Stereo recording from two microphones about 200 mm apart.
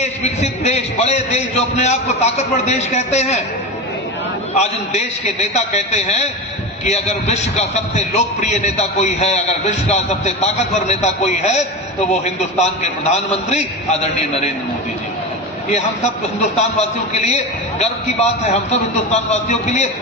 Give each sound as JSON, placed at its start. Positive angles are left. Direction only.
{"t": 0.0, "sound": "a man's voice", "side_deg": 35}
{"t": 4.5, "sound": "a man's voice", "side_deg": 35}
{"t": 16.6, "sound": "a man's voice", "side_deg": 35}